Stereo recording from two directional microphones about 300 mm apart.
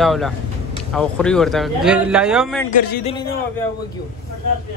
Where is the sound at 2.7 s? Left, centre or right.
Left.